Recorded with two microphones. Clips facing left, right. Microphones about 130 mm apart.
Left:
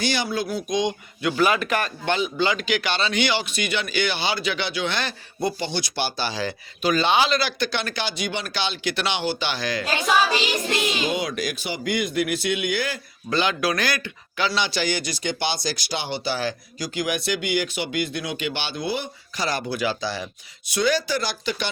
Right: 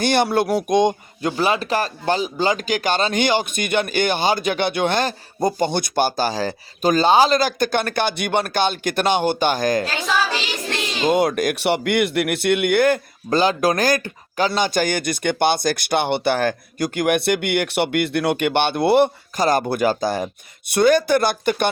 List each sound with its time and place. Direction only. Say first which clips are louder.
0.0 s speech: right 7 dB; 55° right (ahead or behind)
1.3 s speech: right 1 dB; 30° right (ahead or behind)
10.1 s child singing: left 1 dB; 15° left (ahead or behind)
11.0 s speech: right 8 dB; 50° right (ahead or behind)
13.3 s speech: right 5 dB; 40° right (ahead or behind); by 19.1 s 65° right (ahead or behind)
19.4 s speech: right 7 dB; 50° right (ahead or behind)